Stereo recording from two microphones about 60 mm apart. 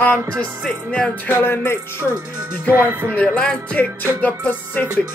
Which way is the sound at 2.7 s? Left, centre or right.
Right.